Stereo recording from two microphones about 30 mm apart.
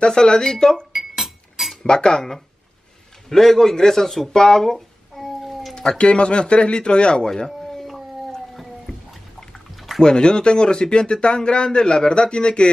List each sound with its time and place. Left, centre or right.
0.0 s speech: left
0.9 s chink: centre
1.8 s speech: left
3.3 s a man's voice: centre
4.3 s speech: left
4.6 s a sound: centre
5.4 s cat: centre
5.9 s a man's voice: left
7.2 s speech: centre
9.8 s liquid: centre
10.0 s a man's voice: left